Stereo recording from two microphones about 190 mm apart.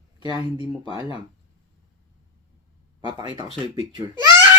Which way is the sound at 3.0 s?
25° right (ahead or behind).